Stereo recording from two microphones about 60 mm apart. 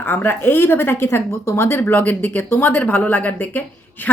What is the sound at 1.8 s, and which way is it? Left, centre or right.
Speech, left.